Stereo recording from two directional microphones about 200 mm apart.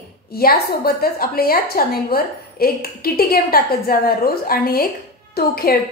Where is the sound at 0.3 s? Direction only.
50° left (ahead or behind).